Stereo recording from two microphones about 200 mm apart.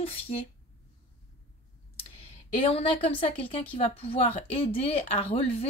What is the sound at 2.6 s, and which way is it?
A woman's voice, 30° left (ahead or behind).